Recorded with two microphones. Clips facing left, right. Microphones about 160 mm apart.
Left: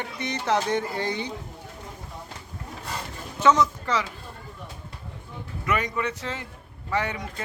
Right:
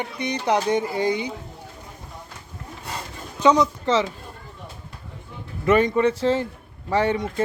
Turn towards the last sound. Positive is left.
turn(degrees=-30)  # may be behind; listen again after turning